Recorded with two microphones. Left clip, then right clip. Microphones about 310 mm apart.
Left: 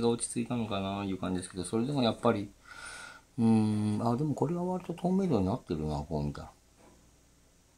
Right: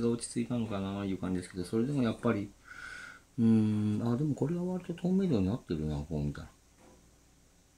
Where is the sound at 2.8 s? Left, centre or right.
Centre.